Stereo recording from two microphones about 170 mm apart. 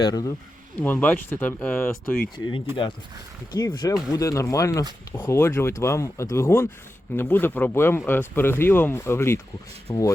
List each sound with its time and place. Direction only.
0.0 s speech: 20° left (ahead or behind)
0.8 s speech: 10° left (ahead or behind)
3.5 s speech: 20° left (ahead or behind)